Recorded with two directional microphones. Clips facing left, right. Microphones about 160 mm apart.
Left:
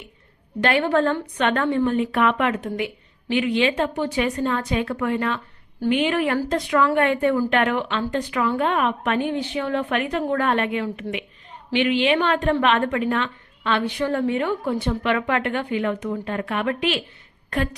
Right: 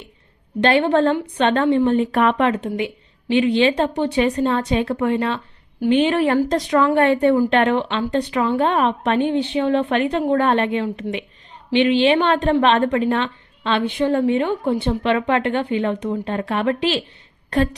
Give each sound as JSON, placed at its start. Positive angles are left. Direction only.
{"t": 0.6, "sound": "a woman's voice", "side_deg": -30}